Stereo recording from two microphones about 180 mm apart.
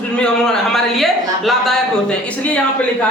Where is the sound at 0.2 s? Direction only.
Centre (ahead or behind).